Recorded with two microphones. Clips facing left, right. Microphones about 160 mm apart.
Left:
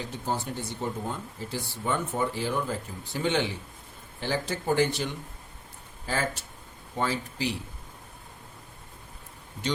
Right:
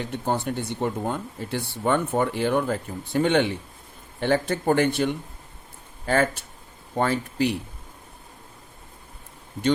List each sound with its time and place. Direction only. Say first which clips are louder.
0.0 s speech: right 5 dB; 60° right (ahead or behind)